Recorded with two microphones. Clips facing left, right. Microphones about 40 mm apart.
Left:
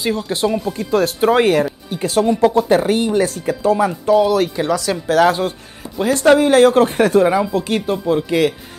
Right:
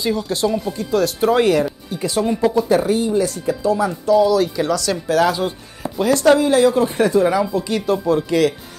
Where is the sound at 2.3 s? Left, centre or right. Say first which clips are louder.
Left 1 dB; left.